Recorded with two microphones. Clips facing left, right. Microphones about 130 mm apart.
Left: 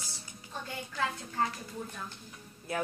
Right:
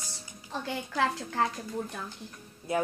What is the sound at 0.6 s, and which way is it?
Speech, 90° right.